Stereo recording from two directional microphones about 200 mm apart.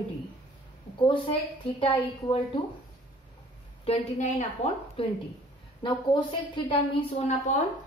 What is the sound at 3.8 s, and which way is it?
A woman's voice, 35° left (ahead or behind).